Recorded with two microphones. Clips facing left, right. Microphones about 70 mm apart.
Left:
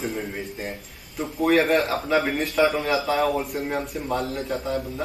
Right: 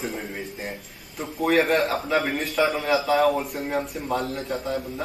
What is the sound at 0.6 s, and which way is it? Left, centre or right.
A man's voice, centre.